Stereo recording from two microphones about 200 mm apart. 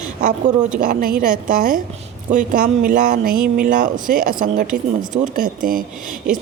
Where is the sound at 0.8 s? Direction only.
45° right (ahead or behind).